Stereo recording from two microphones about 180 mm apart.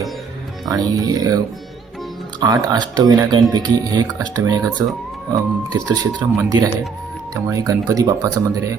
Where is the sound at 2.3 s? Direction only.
20° right (ahead or behind).